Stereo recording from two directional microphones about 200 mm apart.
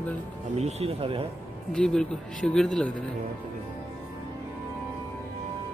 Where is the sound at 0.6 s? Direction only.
30° right (ahead or behind).